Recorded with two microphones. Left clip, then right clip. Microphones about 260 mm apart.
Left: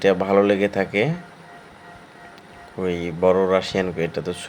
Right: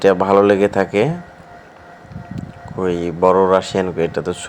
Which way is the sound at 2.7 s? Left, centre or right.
Centre.